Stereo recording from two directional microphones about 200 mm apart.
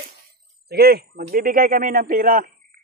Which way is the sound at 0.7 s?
50° right (ahead or behind).